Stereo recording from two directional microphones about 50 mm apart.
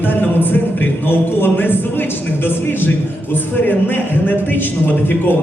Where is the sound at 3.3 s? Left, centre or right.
Left.